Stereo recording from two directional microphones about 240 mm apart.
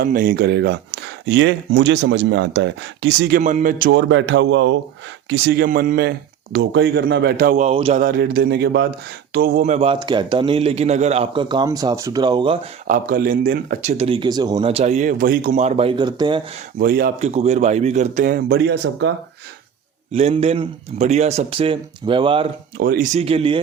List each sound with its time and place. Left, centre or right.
0.0 s speech: right
3.8 s speech: right
5.3 s a man's voice: right; by 12.5 s centre
12.9 s speech: right
13.9 s a man's voice: right
16.8 s speech: right
20.1 s a man's voice: right
22.8 s speech: right
23.1 s a man's voice: right